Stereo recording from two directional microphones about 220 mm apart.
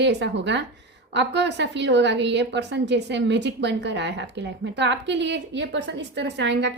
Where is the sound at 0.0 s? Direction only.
50° right (ahead or behind).